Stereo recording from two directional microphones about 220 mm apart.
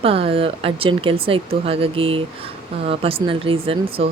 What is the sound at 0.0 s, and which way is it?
Speech, 25° right (ahead or behind).